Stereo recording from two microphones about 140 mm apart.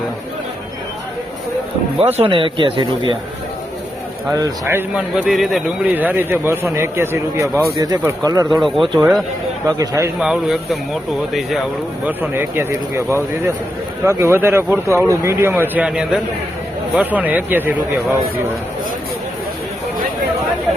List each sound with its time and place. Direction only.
2.0 s speech: 45° right (ahead or behind)
4.4 s speech: 25° right (ahead or behind)
4.9 s speech: 5° right (ahead or behind); by 8.4 s 25° right (ahead or behind)
8.6 s speech: centre (ahead or behind)
9.6 s speech: 25° right (ahead or behind)
10.2 s speech: 5° right (ahead or behind)
12.2 s speech: 15° right (ahead or behind)
14.0 s speech: 20° right (ahead or behind)